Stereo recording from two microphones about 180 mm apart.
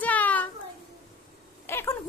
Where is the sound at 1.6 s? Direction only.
15° left (ahead or behind).